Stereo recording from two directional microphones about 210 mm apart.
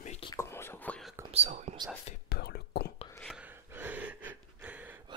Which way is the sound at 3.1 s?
Centre (ahead or behind).